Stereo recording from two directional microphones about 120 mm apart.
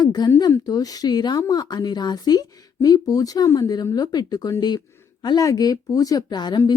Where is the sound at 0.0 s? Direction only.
35° left (ahead or behind).